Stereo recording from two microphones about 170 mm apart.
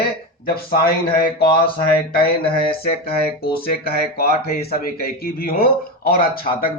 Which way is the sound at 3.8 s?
65° left (ahead or behind).